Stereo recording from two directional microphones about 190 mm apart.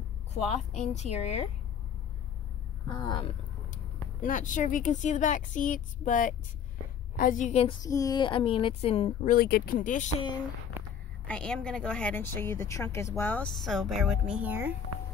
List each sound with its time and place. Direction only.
0.3 s speech: 35° left (ahead or behind)
3.0 s a woman's voice: 25° left (ahead or behind)
3.7 s speech: 45° left (ahead or behind)
7.8 s a woman's voice: 20° left (ahead or behind)
9.3 s speech: 50° left (ahead or behind)
11.2 s a woman's voice: 5° left (ahead or behind)